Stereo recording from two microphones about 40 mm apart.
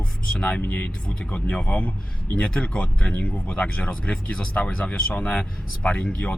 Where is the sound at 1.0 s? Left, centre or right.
Left.